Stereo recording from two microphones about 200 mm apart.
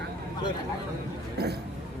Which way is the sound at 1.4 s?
50° right (ahead or behind).